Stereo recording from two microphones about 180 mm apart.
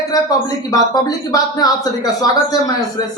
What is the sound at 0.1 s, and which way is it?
Speech, 20° left (ahead or behind).